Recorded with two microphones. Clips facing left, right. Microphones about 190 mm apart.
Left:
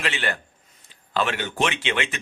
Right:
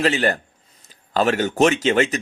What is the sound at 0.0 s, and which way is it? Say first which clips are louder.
Speech: right 9 dB; 40° right (ahead or behind).